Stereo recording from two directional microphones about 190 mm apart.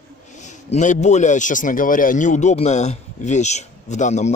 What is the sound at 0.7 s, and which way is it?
A man's voice, 40° left (ahead or behind).